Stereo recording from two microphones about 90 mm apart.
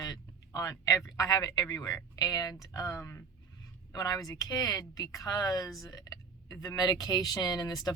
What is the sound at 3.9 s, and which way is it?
Speech, 40° left (ahead or behind).